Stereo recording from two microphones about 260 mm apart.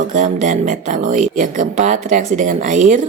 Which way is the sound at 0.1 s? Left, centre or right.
Right.